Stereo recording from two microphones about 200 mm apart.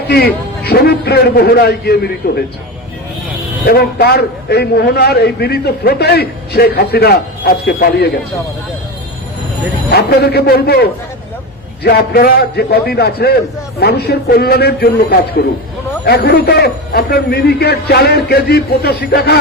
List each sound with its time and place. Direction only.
0.6 s a man's voice: 50° left (ahead or behind)
3.7 s a man's voice: 50° left (ahead or behind)
9.9 s a man's voice: 55° left (ahead or behind)